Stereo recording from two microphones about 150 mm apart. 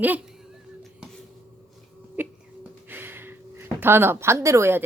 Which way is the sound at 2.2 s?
10° right (ahead or behind).